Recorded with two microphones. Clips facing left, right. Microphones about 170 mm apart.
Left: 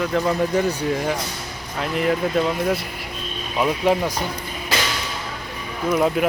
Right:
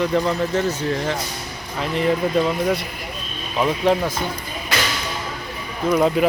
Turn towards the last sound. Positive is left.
turn(degrees=0)  # may be behind; listen again after turning